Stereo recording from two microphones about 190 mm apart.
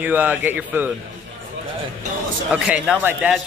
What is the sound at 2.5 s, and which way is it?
Speech, 5° right (ahead or behind).